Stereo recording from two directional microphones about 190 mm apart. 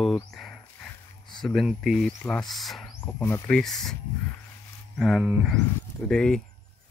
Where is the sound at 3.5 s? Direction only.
Centre (ahead or behind).